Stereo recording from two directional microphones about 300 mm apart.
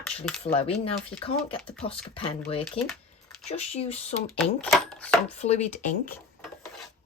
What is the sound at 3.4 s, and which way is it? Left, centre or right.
Speech, left.